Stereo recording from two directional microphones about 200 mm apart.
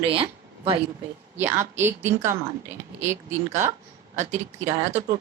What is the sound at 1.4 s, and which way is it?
A woman's voice, 10° right (ahead or behind).